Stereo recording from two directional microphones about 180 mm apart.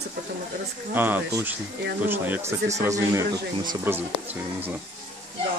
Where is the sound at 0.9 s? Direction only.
10° right (ahead or behind).